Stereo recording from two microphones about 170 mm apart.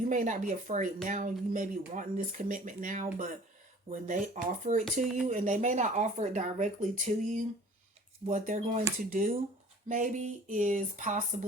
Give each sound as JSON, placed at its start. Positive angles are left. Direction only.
{"t": 0.1, "sound": "speech", "side_deg": -50}